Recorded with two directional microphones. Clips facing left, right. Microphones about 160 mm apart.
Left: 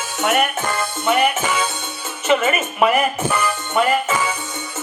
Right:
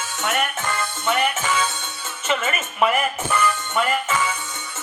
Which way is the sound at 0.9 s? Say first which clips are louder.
Left 5 dB; 10° left (ahead or behind).